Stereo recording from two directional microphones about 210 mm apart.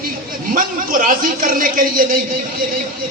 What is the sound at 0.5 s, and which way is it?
A man's voice, 40° right (ahead or behind).